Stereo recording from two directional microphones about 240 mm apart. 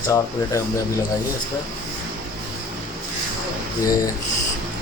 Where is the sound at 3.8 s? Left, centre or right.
Centre.